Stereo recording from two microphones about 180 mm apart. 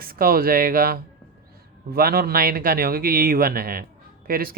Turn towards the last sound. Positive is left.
turn(degrees=-55)  # may be behind; listen again after turning